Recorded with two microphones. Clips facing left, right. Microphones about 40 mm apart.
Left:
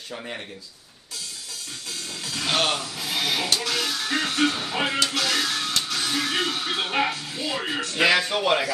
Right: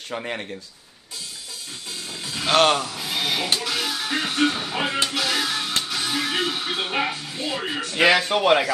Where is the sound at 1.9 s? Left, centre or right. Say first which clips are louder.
Right 1 dB; centre.